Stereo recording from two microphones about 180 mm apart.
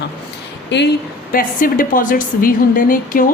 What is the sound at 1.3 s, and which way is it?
A woman's voice, 50° left (ahead or behind).